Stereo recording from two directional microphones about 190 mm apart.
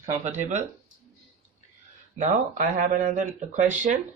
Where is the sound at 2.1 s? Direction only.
45° right (ahead or behind).